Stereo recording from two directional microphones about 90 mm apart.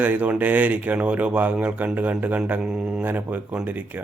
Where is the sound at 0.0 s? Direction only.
15° right (ahead or behind).